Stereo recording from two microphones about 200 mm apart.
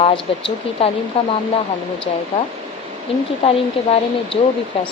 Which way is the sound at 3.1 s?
30° left (ahead or behind).